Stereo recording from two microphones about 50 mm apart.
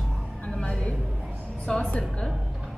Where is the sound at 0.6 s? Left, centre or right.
Left.